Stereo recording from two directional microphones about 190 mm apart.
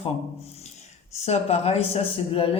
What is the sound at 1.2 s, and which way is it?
Speech, 35° left (ahead or behind).